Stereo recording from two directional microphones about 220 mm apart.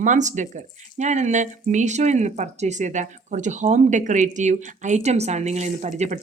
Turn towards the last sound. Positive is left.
turn(degrees=-30)  # may be behind; listen again after turning